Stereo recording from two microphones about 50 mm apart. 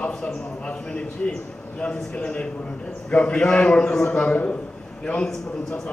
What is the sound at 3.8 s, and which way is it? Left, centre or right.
Speech, left.